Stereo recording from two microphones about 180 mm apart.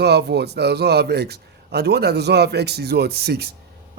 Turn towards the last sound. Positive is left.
turn(degrees=-60)  # may be behind; listen again after turning